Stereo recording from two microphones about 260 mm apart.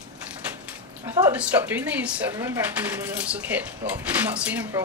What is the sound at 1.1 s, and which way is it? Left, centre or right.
Speech, centre.